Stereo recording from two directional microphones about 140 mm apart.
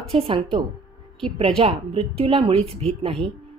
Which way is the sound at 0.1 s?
40° right (ahead or behind).